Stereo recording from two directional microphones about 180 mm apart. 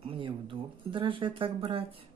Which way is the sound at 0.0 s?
30° right (ahead or behind).